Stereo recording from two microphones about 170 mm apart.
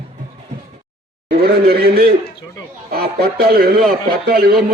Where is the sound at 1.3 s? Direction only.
65° right (ahead or behind).